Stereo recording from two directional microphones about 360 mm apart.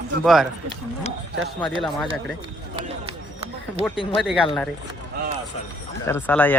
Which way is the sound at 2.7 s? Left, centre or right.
Centre.